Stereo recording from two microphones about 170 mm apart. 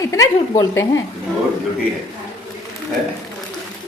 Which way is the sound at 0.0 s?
20° left (ahead or behind).